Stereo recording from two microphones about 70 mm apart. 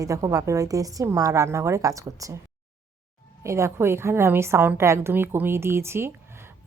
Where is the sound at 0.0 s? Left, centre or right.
Right.